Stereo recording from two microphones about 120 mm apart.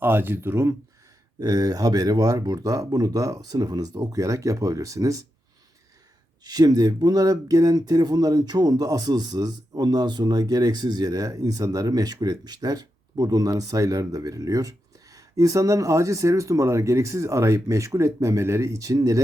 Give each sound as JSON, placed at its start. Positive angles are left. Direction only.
{"t": 0.0, "sound": "speech", "side_deg": -15}
{"t": 1.4, "sound": "speech", "side_deg": -30}
{"t": 6.4, "sound": "speech", "side_deg": -35}